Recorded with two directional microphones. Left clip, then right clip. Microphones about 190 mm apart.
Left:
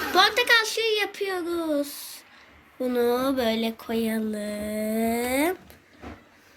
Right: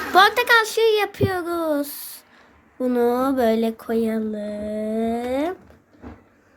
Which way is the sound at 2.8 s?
40° right (ahead or behind).